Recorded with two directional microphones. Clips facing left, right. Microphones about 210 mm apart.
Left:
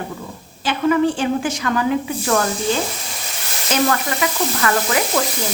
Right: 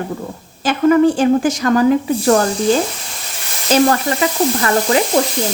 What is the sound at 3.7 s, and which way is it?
Speech, 30° right (ahead or behind).